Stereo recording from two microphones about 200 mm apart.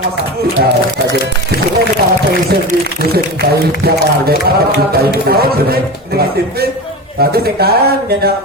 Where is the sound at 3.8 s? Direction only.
50° right (ahead or behind).